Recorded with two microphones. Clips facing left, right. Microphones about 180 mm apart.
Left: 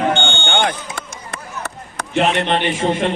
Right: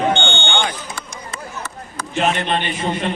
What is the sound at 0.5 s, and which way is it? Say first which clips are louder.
Chop: left 3 dB; 55° left (ahead or behind).